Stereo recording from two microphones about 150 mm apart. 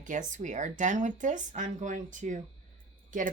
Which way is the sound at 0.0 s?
55° right (ahead or behind).